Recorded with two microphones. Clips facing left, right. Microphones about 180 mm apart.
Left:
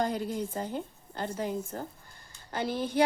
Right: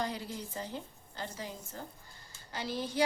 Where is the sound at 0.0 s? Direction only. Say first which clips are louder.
Left 7 dB; 50° left (ahead or behind).